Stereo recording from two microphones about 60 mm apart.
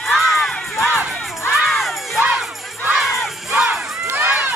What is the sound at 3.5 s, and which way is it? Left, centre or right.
Crowd, centre.